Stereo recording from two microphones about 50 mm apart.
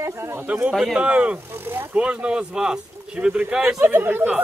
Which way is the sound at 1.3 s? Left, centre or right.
Right.